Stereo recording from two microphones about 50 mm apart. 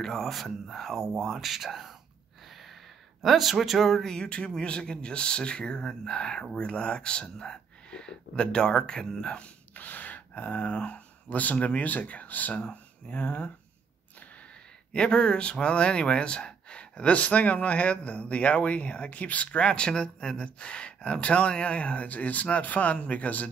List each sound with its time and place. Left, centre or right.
0.0 s speech: centre
3.2 s speech: centre
9.8 s speech: left
14.9 s speech: centre